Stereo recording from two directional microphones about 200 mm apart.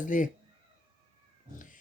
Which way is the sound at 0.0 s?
40° left (ahead or behind).